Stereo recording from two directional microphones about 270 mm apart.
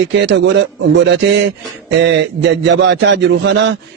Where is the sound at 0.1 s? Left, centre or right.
Right.